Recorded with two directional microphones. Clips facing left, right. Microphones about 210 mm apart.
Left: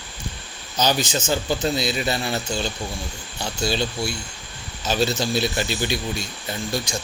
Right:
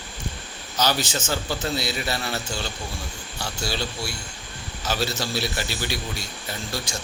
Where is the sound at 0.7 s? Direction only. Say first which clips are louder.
Left 3 dB; 15° left (ahead or behind).